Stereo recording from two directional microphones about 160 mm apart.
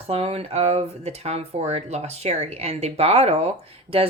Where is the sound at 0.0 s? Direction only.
40° right (ahead or behind).